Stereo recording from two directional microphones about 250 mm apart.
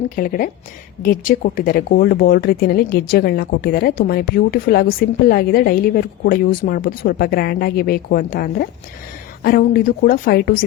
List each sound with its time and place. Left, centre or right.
0.2 s speech: left